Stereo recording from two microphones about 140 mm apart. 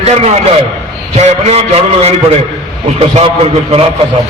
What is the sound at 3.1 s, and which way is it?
Speech, 45° right (ahead or behind).